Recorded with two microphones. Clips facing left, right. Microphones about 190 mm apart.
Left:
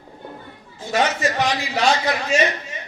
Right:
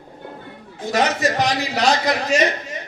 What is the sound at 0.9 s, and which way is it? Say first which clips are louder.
A man's voice: right 1 dB; 40° right (ahead or behind).